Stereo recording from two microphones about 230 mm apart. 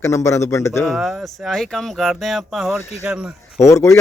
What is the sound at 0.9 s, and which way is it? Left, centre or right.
Speech, centre.